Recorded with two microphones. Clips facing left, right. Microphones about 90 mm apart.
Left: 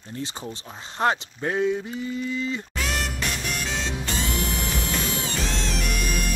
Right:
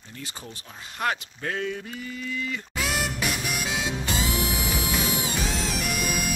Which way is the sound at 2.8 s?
5° right (ahead or behind).